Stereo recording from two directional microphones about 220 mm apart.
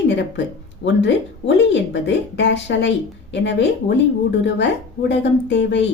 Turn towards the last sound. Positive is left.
turn(degrees=55)  # may be behind; listen again after turning